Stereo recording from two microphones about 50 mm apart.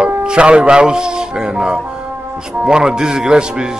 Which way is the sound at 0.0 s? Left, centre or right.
Centre.